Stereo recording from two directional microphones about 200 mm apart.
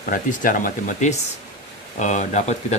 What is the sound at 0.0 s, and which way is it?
Speech, 40° left (ahead or behind).